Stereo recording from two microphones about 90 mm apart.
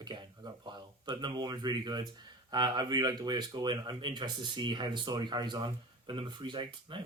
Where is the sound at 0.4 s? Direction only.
50° right (ahead or behind).